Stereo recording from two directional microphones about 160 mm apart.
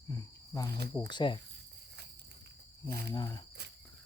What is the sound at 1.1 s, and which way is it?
Speech, 30° left (ahead or behind).